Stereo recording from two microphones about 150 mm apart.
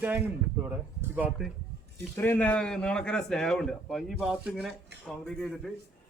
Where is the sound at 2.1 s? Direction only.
10° left (ahead or behind).